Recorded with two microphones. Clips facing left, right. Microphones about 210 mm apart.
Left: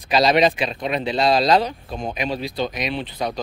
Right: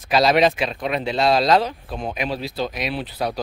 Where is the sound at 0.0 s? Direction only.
Centre (ahead or behind).